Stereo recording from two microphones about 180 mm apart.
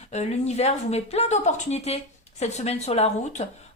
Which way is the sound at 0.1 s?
40° left (ahead or behind).